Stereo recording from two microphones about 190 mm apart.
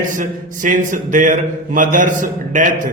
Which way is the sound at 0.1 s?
45° right (ahead or behind).